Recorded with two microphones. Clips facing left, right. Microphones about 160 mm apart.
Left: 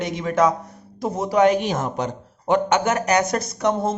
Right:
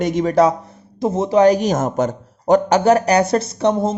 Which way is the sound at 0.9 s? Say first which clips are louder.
Right 4 dB; 25° right (ahead or behind).